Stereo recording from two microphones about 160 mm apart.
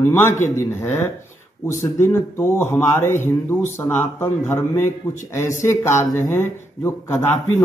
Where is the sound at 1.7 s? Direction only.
20° left (ahead or behind).